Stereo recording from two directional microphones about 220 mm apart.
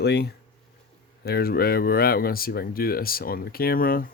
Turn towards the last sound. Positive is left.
turn(degrees=40)  # may be behind; listen again after turning